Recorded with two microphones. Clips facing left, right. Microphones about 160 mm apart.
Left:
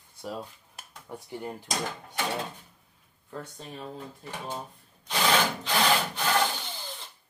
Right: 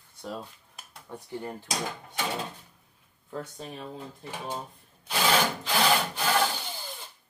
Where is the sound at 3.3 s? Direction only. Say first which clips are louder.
Right 2 dB; 5° right (ahead or behind).